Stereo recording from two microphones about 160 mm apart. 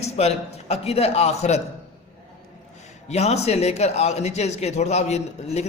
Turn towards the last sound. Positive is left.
turn(degrees=45)  # may be behind; listen again after turning